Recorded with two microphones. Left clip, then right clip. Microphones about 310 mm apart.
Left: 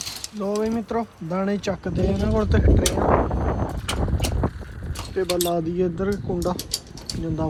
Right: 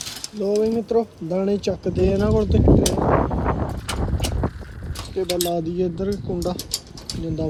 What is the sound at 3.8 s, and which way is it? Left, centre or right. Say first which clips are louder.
Vehicle: even; centre.